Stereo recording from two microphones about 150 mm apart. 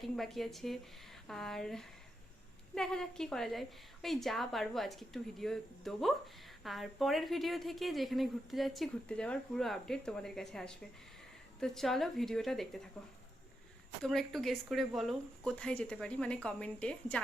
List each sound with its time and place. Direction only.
0.0 s a woman's voice: centre (ahead or behind)
14.0 s speech: centre (ahead or behind)